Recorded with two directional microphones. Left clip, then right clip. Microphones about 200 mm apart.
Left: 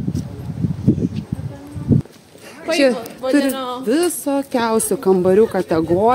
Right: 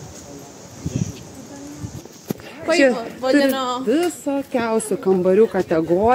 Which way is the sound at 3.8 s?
25° left (ahead or behind).